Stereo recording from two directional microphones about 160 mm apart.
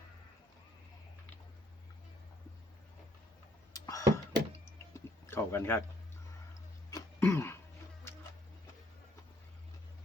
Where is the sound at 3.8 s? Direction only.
20° left (ahead or behind).